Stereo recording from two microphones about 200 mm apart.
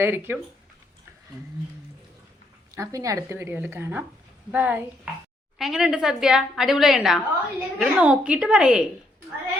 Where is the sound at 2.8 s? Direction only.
15° right (ahead or behind).